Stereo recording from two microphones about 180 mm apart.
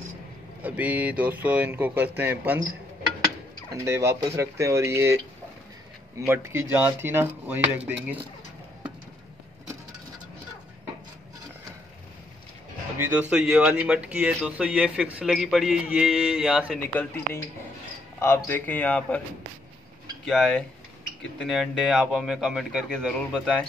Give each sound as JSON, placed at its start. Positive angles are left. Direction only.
{"t": 0.6, "sound": "speech", "side_deg": -10}
{"t": 3.7, "sound": "speech", "side_deg": -15}
{"t": 12.9, "sound": "speech", "side_deg": -10}
{"t": 16.9, "sound": "a man's voice", "side_deg": 10}
{"t": 20.2, "sound": "speech", "side_deg": 5}